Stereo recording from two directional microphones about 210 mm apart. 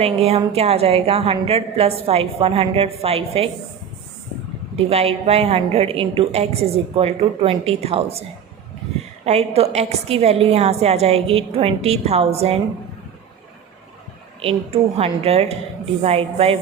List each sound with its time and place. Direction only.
0.0 s a woman's voice: 30° right (ahead or behind)
4.9 s a woman's voice: 30° right (ahead or behind)
9.2 s a woman's voice: 30° right (ahead or behind)
14.4 s a woman's voice: 30° right (ahead or behind)